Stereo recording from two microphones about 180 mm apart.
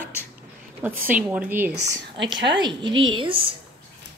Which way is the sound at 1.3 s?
10° right (ahead or behind).